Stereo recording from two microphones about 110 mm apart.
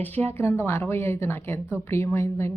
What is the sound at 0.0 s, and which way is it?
A woman's voice, 15° left (ahead or behind).